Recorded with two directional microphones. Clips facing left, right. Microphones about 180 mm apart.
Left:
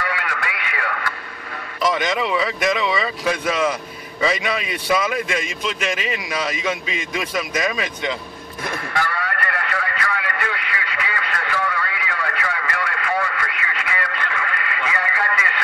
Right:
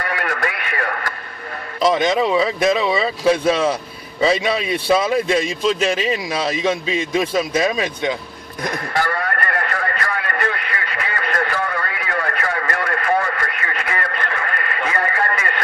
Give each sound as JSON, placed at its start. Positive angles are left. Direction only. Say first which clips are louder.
{"t": 0.0, "sound": "radio", "louder": "right 3 dB", "side_deg": -45}
{"t": 1.8, "sound": "a man's voice", "louder": "right 5 dB", "side_deg": -30}
{"t": 8.6, "sound": "a sound", "louder": "right 3 dB", "side_deg": -40}